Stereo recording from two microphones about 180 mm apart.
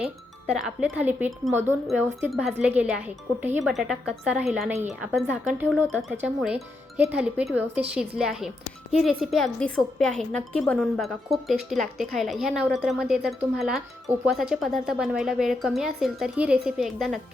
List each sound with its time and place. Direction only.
0.4 s a woman's voice: 5° right (ahead or behind)